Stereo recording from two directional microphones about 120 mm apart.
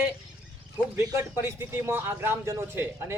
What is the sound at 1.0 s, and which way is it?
Speech, 25° right (ahead or behind).